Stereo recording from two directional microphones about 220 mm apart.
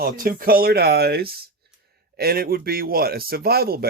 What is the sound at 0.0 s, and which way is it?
Speech, 40° right (ahead or behind).